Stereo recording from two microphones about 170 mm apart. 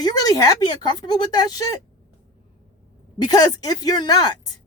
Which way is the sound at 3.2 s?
25° left (ahead or behind).